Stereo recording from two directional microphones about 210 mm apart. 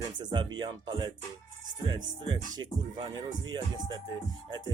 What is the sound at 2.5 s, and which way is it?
Speech, 20° right (ahead or behind).